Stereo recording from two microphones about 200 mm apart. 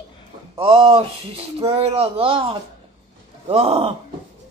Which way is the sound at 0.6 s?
30° right (ahead or behind).